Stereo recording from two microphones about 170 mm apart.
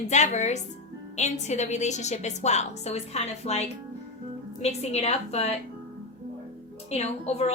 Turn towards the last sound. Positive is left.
turn(degrees=40)  # may be behind; listen again after turning